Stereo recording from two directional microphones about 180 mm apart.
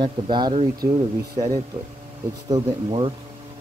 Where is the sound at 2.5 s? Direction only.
30° right (ahead or behind).